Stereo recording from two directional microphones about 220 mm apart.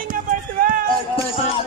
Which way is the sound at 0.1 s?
40° right (ahead or behind).